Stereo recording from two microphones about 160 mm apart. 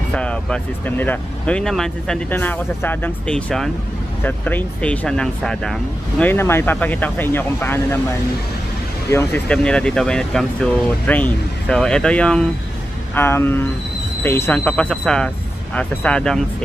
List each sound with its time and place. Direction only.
0.1 s speech: 5° left (ahead or behind)
9.1 s speech: 15° left (ahead or behind)
9.5 s speech: 5° left (ahead or behind)